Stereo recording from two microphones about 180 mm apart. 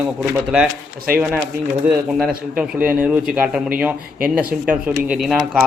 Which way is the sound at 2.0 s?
5° right (ahead or behind).